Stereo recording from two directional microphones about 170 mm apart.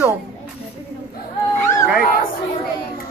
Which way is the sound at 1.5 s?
15° left (ahead or behind).